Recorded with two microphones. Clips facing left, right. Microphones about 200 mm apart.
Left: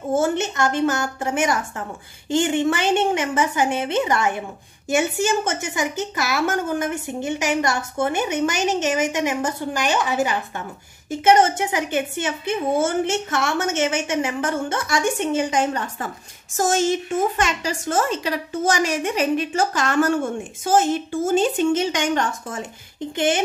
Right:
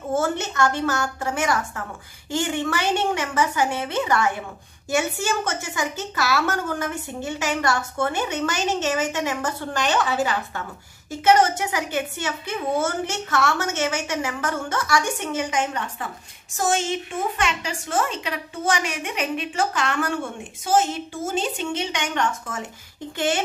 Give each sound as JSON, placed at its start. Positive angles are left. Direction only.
{"t": 0.1, "sound": "a woman's voice", "side_deg": 20}
{"t": 21.4, "sound": "a woman's voice", "side_deg": 45}
{"t": 23.1, "sound": "a woman's voice", "side_deg": 20}